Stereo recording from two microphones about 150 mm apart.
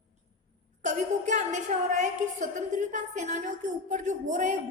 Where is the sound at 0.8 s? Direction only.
55° right (ahead or behind).